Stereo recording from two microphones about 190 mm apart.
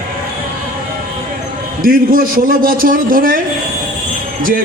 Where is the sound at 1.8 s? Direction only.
45° right (ahead or behind).